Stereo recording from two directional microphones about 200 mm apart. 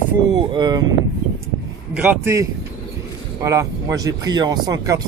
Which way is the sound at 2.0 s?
10° right (ahead or behind).